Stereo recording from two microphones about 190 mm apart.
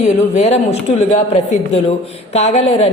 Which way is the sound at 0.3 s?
35° left (ahead or behind).